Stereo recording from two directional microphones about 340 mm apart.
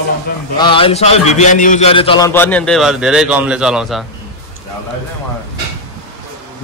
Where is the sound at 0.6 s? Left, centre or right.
Centre.